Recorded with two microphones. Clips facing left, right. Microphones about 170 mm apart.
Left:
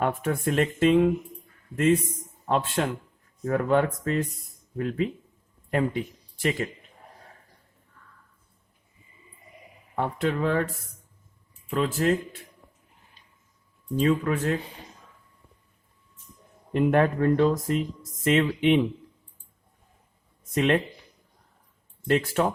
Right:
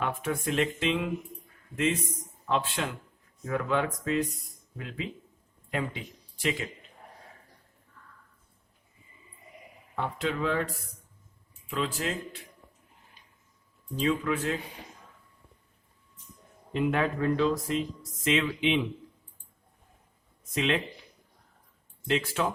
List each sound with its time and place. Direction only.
0.0 s speech: 45° left (ahead or behind)
9.9 s speech: 45° left (ahead or behind)
11.7 s speech: 50° left (ahead or behind)
13.9 s speech: 50° left (ahead or behind)
16.7 s speech: 50° left (ahead or behind)
20.6 s speech: 50° left (ahead or behind)
22.0 s speech: 55° left (ahead or behind)